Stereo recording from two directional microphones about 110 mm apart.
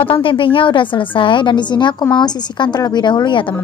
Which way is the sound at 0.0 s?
50° left (ahead or behind).